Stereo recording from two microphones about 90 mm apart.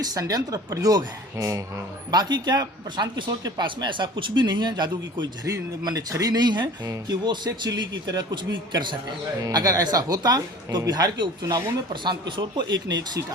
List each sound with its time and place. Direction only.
0.0 s a man's voice: 45° right (ahead or behind)
5.5 s speech: 45° right (ahead or behind)
9.4 s speech: 45° right (ahead or behind)